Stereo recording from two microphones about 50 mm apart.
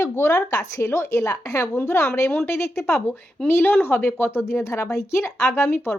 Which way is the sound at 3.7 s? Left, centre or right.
Left.